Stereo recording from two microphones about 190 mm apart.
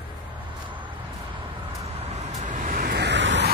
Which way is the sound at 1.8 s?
35° right (ahead or behind).